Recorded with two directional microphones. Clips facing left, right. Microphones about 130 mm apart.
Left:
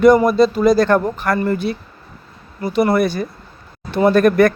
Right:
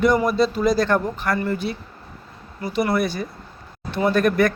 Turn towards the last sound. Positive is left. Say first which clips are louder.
# left 6 dB
turn(degrees=50)  # may be behind; listen again after turning